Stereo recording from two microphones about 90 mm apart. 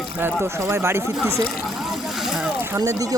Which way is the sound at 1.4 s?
Centre (ahead or behind).